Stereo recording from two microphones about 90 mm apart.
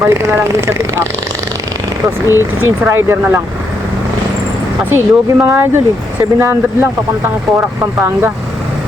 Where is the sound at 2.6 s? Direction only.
25° right (ahead or behind).